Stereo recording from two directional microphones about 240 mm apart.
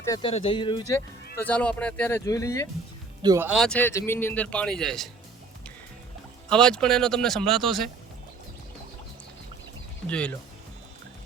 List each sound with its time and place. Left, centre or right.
0.0 s speech: centre
1.4 s speech: centre
3.2 s speech: centre
6.5 s speech: centre
10.1 s speech: centre